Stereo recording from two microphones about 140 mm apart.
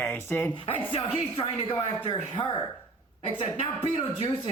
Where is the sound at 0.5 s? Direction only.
40° left (ahead or behind).